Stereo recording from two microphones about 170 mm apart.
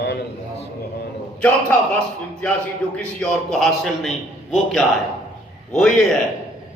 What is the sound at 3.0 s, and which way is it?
A man's voice, 5° left (ahead or behind).